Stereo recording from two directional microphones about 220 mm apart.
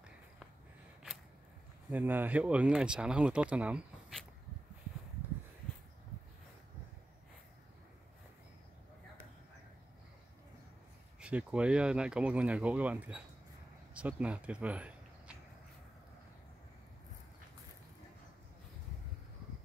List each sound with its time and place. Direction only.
1.9 s speech: 10° right (ahead or behind)
11.1 s speech: 5° right (ahead or behind)